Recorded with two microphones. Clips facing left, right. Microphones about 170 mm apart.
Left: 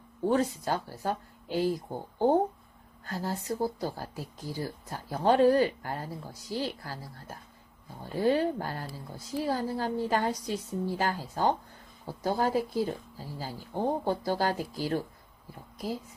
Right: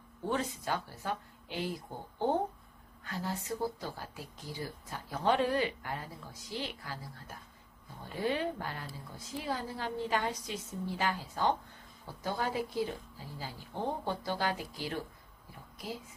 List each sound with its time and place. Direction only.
0.3 s speech: 40° left (ahead or behind)